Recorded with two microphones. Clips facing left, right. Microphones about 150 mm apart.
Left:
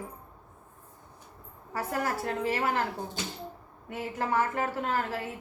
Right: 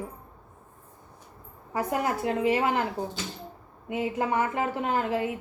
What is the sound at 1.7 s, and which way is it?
A woman's voice, 15° right (ahead or behind).